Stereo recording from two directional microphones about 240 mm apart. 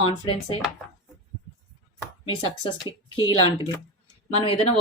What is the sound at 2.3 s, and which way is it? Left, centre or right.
Speech, centre.